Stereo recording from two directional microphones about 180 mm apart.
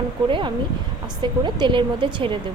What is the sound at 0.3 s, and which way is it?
A woman's voice, 30° right (ahead or behind).